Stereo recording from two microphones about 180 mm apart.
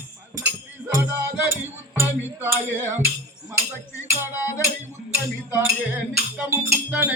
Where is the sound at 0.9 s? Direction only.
15° right (ahead or behind).